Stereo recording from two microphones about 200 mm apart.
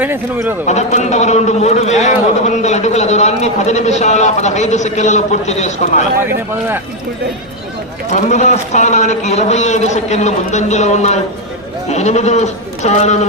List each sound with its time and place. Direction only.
0.0 s speech: 10° right (ahead or behind)
0.7 s a man's voice: 35° left (ahead or behind)
6.1 s speech: 10° right (ahead or behind)
8.1 s a man's voice: 35° left (ahead or behind)